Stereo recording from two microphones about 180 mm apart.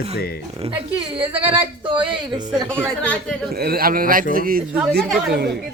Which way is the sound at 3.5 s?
60° right (ahead or behind).